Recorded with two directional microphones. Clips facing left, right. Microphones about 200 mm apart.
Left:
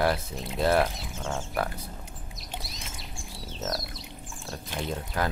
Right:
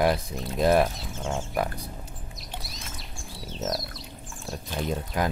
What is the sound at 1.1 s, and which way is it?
Speech, centre (ahead or behind).